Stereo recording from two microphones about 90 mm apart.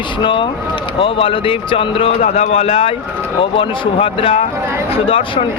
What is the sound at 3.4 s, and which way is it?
Speech, 75° left (ahead or behind).